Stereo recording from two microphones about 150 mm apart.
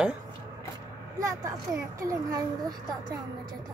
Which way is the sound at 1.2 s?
25° right (ahead or behind).